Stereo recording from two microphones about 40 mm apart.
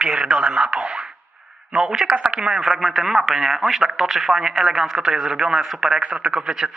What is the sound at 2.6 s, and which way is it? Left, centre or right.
Speech, centre.